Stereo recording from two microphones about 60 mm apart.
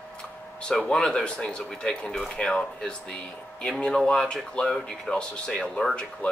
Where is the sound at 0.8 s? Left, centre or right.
Centre.